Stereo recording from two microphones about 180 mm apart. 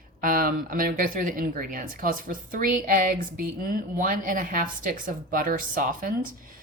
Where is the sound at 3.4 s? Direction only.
50° right (ahead or behind).